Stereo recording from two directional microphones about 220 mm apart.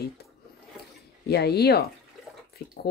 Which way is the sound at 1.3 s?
45° left (ahead or behind).